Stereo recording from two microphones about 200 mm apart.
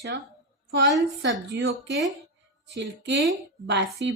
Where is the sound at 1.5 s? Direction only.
60° right (ahead or behind).